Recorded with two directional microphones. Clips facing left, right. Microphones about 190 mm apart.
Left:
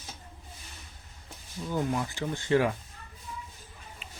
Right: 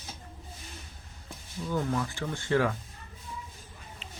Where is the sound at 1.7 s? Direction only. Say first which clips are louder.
Even; 20° left (ahead or behind).